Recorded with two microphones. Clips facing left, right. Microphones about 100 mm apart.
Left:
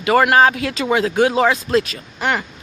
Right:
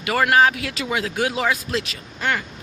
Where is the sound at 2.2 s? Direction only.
20° left (ahead or behind).